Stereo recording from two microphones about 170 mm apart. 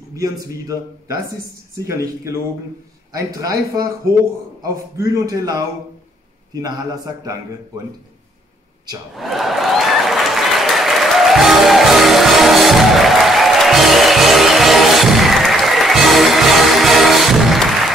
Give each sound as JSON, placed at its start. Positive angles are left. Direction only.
{"t": 0.1, "sound": "a man's voice", "side_deg": -20}
{"t": 3.3, "sound": "a man's voice", "side_deg": -20}
{"t": 4.9, "sound": "a man's voice", "side_deg": -20}
{"t": 9.1, "sound": "applause", "side_deg": 0}